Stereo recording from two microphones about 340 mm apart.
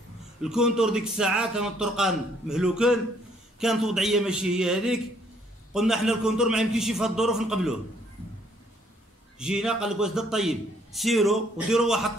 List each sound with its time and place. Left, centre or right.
0.4 s a man's voice: centre
9.4 s a man's voice: centre